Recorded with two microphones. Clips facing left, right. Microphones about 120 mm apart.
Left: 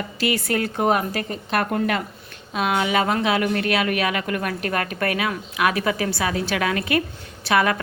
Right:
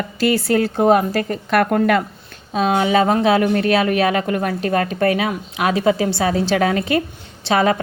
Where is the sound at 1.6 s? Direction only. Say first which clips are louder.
Right 8 dB; 60° right (ahead or behind).